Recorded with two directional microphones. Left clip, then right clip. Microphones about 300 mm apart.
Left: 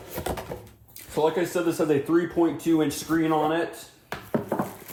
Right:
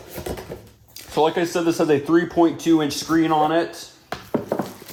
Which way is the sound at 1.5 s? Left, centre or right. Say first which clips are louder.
Right 5 dB; right.